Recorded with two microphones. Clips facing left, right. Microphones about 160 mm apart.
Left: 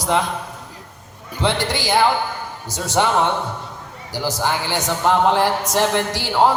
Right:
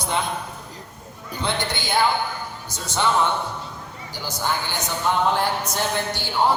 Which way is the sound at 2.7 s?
75° left (ahead or behind).